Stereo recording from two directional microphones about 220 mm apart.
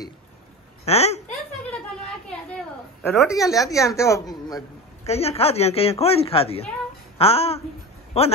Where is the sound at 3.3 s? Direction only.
15° left (ahead or behind).